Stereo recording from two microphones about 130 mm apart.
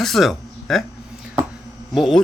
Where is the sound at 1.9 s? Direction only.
Centre (ahead or behind).